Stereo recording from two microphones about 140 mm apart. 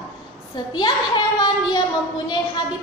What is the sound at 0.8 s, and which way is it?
A woman's voice, 30° left (ahead or behind).